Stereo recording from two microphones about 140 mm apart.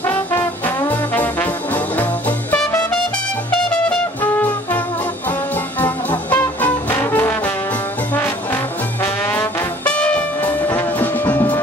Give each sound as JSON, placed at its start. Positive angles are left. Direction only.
{"t": 0.0, "sound": "trombone", "side_deg": 15}
{"t": 3.7, "sound": "music", "side_deg": 5}
{"t": 5.8, "sound": "brass instrument", "side_deg": 15}
{"t": 9.0, "sound": "brass instrument", "side_deg": 15}